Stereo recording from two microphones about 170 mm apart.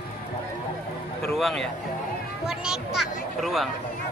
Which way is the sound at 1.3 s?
Centre (ahead or behind).